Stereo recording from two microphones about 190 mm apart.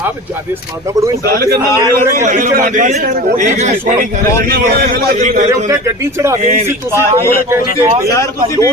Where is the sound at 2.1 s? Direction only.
45° right (ahead or behind).